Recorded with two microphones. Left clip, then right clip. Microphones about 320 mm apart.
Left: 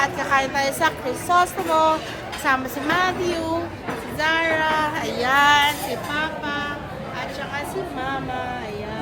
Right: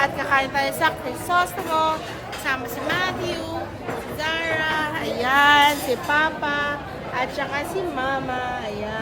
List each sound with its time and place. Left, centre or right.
0.0 s a child's voice: centre
2.4 s a woman's voice: centre
4.2 s a sound: left
4.6 s a child's voice: centre; by 7.6 s right